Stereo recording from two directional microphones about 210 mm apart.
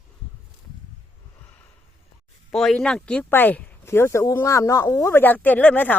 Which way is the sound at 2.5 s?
Centre (ahead or behind).